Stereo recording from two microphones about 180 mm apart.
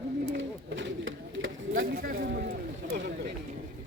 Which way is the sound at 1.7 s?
55° right (ahead or behind).